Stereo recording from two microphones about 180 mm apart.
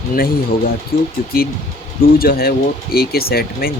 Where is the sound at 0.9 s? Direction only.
55° left (ahead or behind).